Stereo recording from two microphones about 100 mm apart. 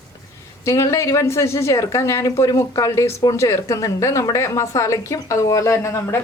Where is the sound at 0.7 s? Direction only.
30° left (ahead or behind).